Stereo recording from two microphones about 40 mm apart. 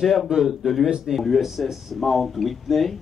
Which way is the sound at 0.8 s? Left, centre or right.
Centre.